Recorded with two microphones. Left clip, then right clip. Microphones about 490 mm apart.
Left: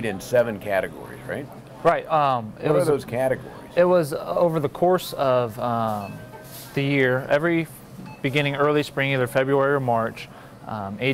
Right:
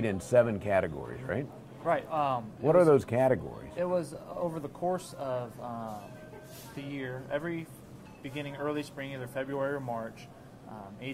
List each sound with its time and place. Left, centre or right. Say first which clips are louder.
0.0 s speech: left 4 dB; right
1.9 s speech: left 10 dB; left
2.8 s speech: left 2 dB; right
3.7 s speech: left 14 dB; left